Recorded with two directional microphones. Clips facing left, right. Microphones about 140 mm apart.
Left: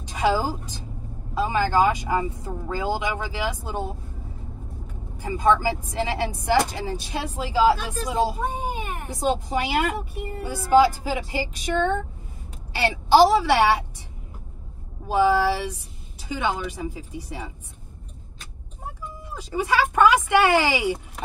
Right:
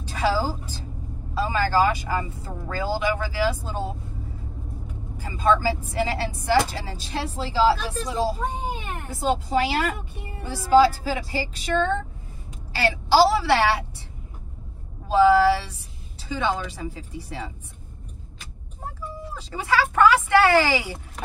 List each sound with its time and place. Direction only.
0.0 s a woman's voice: 15° left (ahead or behind)
5.1 s a woman's voice: 20° left (ahead or behind)
15.0 s a woman's voice: 15° left (ahead or behind)
19.3 s a woman's voice: 15° left (ahead or behind)